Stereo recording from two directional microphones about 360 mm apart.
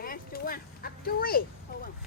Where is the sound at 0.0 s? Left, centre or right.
Left.